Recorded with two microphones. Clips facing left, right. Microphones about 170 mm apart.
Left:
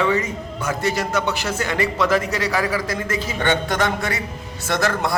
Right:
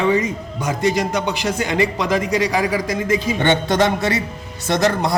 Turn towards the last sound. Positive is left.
turn(degrees=-20)  # may be behind; listen again after turning